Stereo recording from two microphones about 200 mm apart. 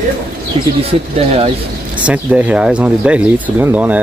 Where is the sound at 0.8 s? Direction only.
30° right (ahead or behind).